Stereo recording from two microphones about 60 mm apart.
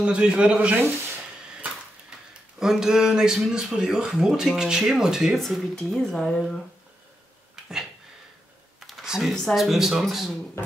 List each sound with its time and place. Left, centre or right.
0.0 s speech: centre
2.6 s speech: centre
5.4 s speech: centre
8.7 s computer keyboard: centre
9.0 s a sound: centre
9.3 s speech: centre
9.6 s speech: centre